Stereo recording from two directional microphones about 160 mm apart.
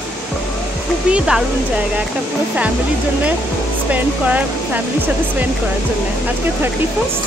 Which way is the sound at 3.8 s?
10° right (ahead or behind).